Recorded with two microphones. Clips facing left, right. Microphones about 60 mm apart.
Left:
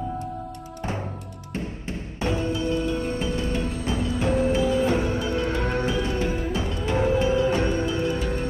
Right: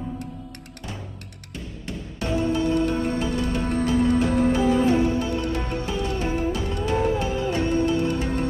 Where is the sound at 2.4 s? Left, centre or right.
Right.